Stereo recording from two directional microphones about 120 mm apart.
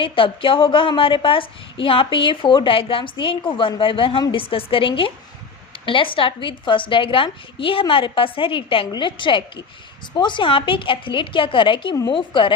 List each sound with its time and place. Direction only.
0.0 s a woman's voice: 45° left (ahead or behind)